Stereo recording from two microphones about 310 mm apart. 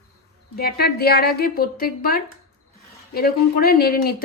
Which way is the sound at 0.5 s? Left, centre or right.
Left.